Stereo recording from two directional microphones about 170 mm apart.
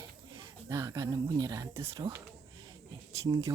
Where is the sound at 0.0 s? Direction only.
20° right (ahead or behind).